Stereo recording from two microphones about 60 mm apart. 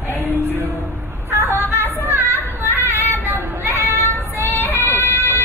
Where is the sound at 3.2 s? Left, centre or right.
Right.